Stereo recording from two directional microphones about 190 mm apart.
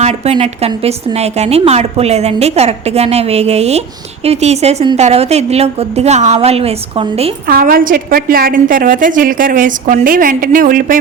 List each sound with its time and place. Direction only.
0.0 s a woman's voice: 35° right (ahead or behind)
7.4 s a woman's voice: 50° right (ahead or behind)